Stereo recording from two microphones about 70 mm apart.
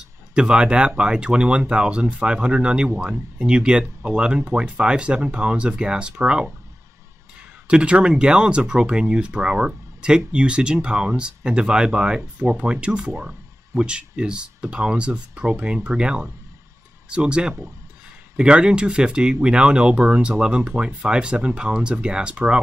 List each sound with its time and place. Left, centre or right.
0.3 s speech: centre
7.6 s speech: centre